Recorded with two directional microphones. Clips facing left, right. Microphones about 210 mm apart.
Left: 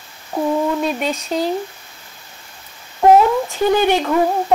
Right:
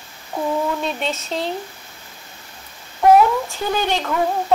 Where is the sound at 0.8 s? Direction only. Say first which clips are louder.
Left 4 dB; 5° left (ahead or behind).